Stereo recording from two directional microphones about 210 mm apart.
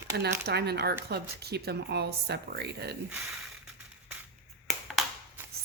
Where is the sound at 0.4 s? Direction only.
50° right (ahead or behind).